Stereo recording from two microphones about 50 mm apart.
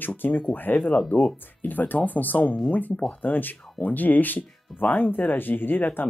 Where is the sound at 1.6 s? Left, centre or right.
Left.